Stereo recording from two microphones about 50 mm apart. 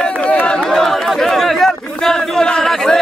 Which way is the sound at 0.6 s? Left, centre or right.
Centre.